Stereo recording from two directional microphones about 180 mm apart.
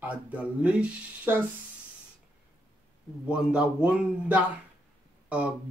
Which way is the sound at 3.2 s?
5° right (ahead or behind).